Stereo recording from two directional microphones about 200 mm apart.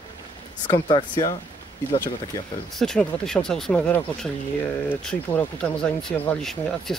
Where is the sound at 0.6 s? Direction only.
20° left (ahead or behind).